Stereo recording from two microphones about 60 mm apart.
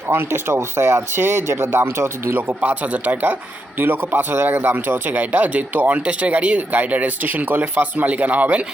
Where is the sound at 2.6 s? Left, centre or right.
Right.